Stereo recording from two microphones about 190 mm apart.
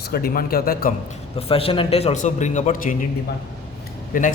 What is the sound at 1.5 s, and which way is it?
A man's voice, 30° left (ahead or behind).